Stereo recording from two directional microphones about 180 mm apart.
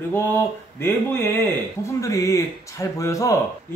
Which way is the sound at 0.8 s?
10° left (ahead or behind).